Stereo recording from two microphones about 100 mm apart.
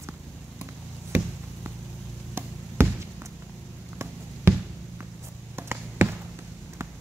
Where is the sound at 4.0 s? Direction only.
25° right (ahead or behind).